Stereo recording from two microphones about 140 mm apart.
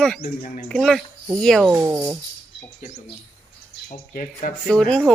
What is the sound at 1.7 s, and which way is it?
Speech, 15° right (ahead or behind).